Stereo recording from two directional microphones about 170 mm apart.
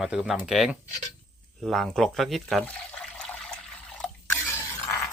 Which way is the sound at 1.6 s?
Centre (ahead or behind).